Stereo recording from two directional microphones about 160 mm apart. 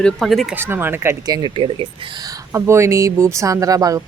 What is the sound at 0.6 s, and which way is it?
Speech, 15° right (ahead or behind).